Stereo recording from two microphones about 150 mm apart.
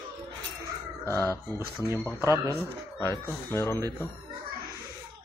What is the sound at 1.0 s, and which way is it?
Speech, 20° left (ahead or behind).